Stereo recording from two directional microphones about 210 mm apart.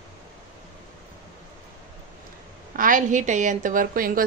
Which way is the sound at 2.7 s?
40° right (ahead or behind).